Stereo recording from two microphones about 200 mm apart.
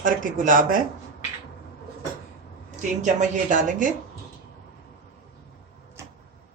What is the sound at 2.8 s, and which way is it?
Speech, 35° right (ahead or behind).